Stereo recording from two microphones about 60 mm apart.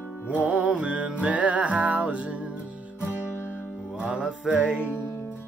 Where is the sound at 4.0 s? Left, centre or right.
Centre.